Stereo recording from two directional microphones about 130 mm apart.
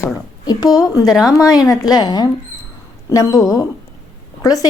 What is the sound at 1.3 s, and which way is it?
A woman's voice, 30° left (ahead or behind).